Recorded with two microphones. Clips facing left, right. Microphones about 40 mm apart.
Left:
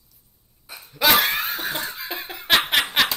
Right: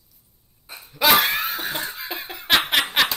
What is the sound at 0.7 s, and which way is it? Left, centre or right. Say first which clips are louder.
Laughter: right 1 dB; centre.